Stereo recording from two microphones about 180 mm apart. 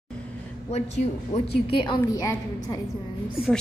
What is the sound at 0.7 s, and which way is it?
A woman's voice, 35° left (ahead or behind).